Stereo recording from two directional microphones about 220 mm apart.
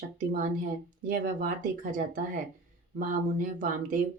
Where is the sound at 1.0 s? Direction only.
40° right (ahead or behind).